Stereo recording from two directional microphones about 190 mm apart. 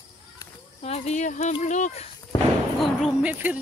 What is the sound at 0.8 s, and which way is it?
Speech, 35° left (ahead or behind).